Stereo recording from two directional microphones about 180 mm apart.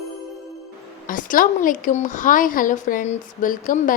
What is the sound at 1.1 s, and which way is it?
A woman's voice, 50° left (ahead or behind).